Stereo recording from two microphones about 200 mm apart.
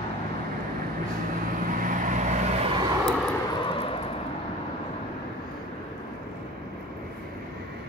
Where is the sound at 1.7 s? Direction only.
40° right (ahead or behind); by 2.9 s 25° right (ahead or behind).